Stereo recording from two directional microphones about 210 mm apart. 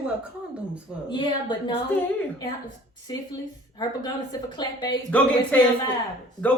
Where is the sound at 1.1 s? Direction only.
20° left (ahead or behind).